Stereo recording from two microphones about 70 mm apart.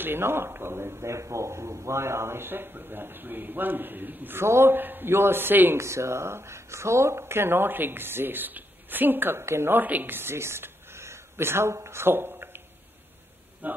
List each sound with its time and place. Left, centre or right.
0.0 s a man's voice: right
5.8 s a man's voice: right